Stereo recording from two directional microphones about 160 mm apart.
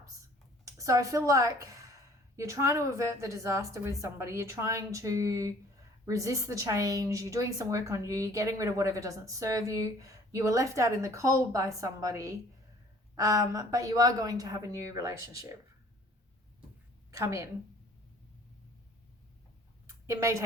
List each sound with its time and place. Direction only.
0.6 s a woman's voice: 20° right (ahead or behind)
17.1 s a woman's voice: 20° right (ahead or behind)
20.1 s a woman's voice: 20° right (ahead or behind)